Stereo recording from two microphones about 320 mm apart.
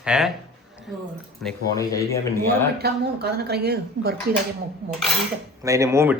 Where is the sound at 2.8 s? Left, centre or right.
Right.